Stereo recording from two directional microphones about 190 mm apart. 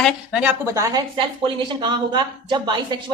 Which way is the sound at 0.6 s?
15° right (ahead or behind).